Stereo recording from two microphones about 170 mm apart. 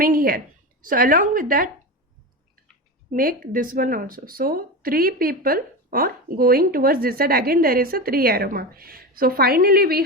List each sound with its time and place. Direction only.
0.0 s a woman's voice: 55° right (ahead or behind)
3.1 s speech: 55° right (ahead or behind)